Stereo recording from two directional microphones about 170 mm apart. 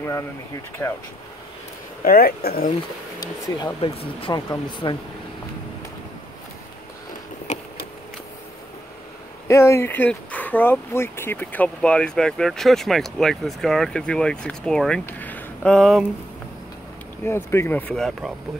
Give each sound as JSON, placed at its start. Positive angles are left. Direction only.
{"t": 0.8, "sound": "speech", "side_deg": 15}
{"t": 2.0, "sound": "speech", "side_deg": 60}
{"t": 3.2, "sound": "speech", "side_deg": 20}
{"t": 7.5, "sound": "a sound", "side_deg": 45}
{"t": 9.5, "sound": "speech", "side_deg": 15}
{"t": 17.2, "sound": "speech", "side_deg": 15}